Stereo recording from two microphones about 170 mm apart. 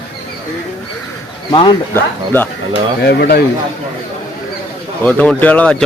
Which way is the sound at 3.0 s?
65° left (ahead or behind).